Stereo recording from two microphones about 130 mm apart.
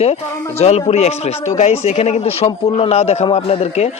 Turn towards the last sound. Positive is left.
turn(degrees=55)  # may be behind; listen again after turning